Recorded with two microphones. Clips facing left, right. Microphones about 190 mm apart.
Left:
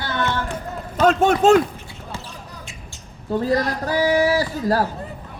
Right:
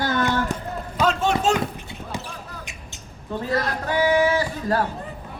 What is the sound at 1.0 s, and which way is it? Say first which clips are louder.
Speech: left 6 dB; 50° left (ahead or behind).